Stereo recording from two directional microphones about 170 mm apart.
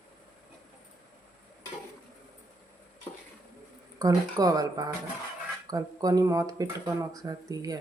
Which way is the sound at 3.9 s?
20° right (ahead or behind).